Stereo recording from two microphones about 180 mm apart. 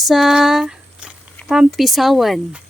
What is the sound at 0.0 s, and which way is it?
Speech, centre (ahead or behind).